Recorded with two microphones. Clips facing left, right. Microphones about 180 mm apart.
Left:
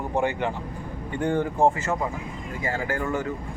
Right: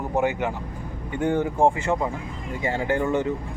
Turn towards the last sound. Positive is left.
turn(degrees=-20)  # may be behind; listen again after turning